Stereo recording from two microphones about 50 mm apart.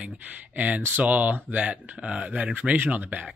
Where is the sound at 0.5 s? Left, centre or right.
Right.